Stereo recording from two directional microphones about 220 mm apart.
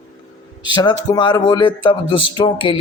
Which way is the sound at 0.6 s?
20° left (ahead or behind).